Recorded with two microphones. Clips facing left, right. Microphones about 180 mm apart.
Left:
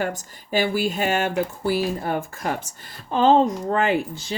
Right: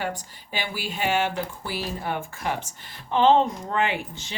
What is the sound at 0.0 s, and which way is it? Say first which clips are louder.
Speech: left 4 dB; 45° left (ahead or behind).